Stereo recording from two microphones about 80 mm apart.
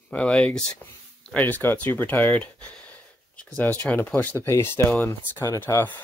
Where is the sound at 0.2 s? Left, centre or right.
Centre.